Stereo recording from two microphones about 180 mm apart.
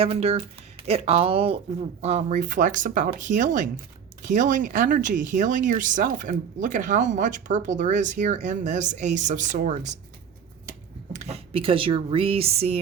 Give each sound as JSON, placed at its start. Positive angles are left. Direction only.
{"t": 0.0, "sound": "speech", "side_deg": -35}
{"t": 11.1, "sound": "speech", "side_deg": -40}